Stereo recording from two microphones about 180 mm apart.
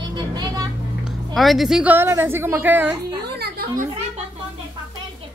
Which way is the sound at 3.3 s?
60° right (ahead or behind).